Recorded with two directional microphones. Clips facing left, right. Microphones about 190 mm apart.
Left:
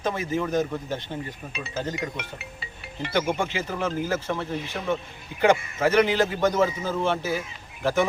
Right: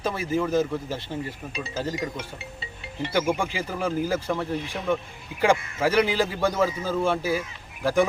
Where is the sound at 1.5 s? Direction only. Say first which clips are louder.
Even; 30° right (ahead or behind).